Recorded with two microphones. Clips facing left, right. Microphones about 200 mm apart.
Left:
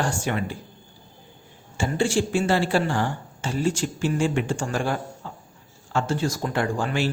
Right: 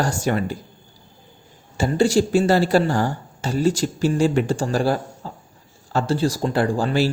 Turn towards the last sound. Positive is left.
turn(degrees=-35)  # may be behind; listen again after turning